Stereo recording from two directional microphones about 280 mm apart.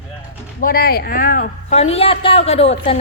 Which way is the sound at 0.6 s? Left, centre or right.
Left.